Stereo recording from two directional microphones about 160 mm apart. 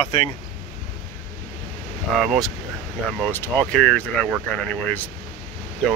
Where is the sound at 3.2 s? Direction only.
15° left (ahead or behind).